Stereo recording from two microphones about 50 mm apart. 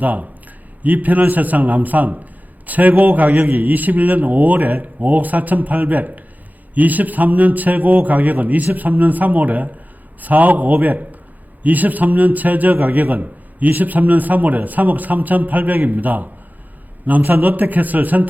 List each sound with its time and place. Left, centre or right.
0.0 s a man's voice: right